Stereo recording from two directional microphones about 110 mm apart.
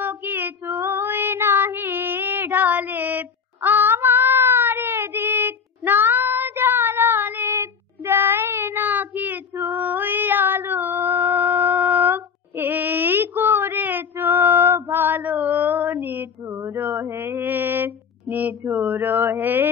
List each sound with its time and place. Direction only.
0.0 s child singing: 15° right (ahead or behind)
16.7 s mantra: 20° right (ahead or behind)